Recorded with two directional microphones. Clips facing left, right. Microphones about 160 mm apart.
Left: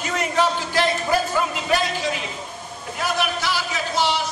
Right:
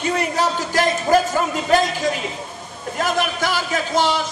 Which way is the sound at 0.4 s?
45° right (ahead or behind).